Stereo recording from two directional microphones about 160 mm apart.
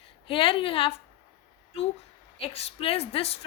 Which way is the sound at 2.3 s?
35° left (ahead or behind).